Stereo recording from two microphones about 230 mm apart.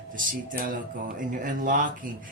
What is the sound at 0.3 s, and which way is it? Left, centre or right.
Speech, right.